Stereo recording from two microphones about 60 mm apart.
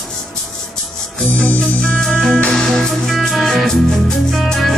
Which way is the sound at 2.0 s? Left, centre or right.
Centre.